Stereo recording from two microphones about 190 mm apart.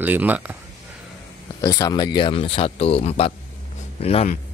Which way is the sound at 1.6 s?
20° left (ahead or behind).